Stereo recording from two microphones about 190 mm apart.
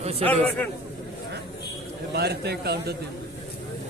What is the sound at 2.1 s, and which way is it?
Speech, 60° right (ahead or behind).